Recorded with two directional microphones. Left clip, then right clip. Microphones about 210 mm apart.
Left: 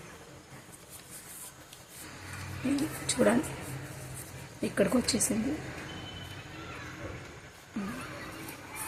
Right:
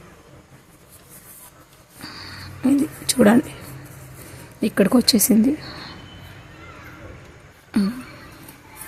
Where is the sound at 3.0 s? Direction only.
50° right (ahead or behind).